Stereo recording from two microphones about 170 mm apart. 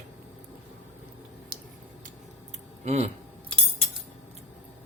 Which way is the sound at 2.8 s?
40° right (ahead or behind).